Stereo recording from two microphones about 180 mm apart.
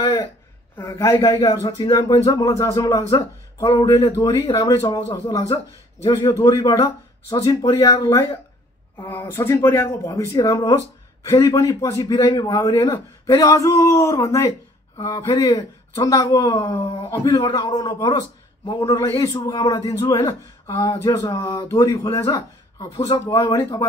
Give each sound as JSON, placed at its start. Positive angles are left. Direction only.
{"t": 0.7, "sound": "a man's voice", "side_deg": 15}